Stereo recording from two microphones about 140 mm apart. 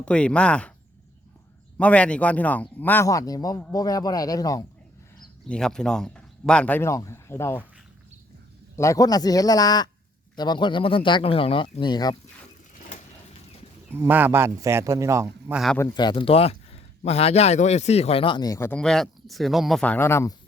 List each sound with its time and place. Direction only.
0.0 s speech: 5° left (ahead or behind)
1.8 s speech: 10° left (ahead or behind)
3.1 s speech: 25° left (ahead or behind)
5.5 s speech: 5° left (ahead or behind)
8.7 s speech: 20° left (ahead or behind)
13.9 s a man's voice: 15° right (ahead or behind)
15.5 s speech: centre (ahead or behind)
16.0 s a man's voice: 35° left (ahead or behind)
18.7 s speech: 5° left (ahead or behind)
19.8 s speech: 15° left (ahead or behind)